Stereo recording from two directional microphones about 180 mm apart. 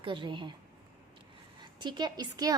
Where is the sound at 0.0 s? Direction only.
25° right (ahead or behind).